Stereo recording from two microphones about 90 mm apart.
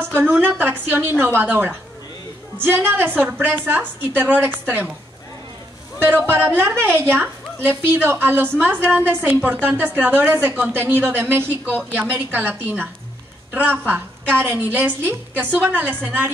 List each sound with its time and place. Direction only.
0.2 s a woman's voice: 20° right (ahead or behind)
6.0 s a woman's voice: 25° right (ahead or behind)